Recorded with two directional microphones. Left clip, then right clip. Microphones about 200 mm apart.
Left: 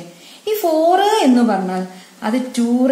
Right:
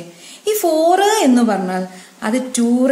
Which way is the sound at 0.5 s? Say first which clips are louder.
Even; 15° right (ahead or behind).